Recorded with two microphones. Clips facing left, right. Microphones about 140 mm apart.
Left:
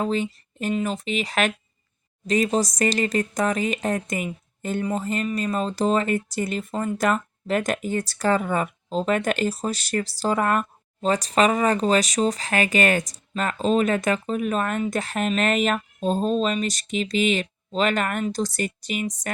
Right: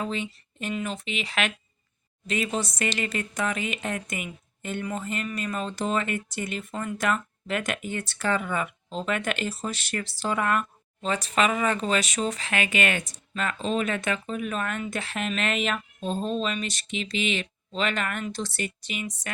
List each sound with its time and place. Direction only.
0.0 s speech: 40° left (ahead or behind)